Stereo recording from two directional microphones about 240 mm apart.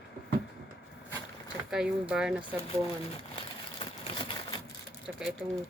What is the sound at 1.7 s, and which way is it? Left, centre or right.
Speech, centre.